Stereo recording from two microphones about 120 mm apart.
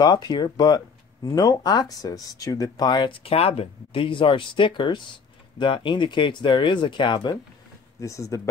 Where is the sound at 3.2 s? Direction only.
55° left (ahead or behind); by 7.4 s 40° left (ahead or behind).